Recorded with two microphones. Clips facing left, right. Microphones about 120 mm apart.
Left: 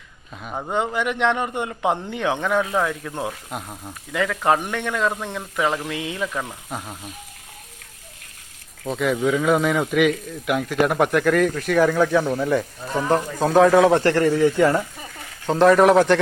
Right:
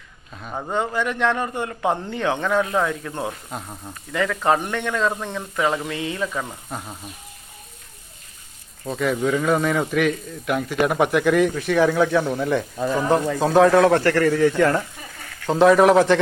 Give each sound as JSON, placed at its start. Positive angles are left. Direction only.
{"t": 0.3, "sound": "speech", "side_deg": 5}
{"t": 8.8, "sound": "speech", "side_deg": 0}
{"t": 14.0, "sound": "a man's voice", "side_deg": 30}
{"t": 14.3, "sound": "speech", "side_deg": 15}
{"t": 15.4, "sound": "speech", "side_deg": 0}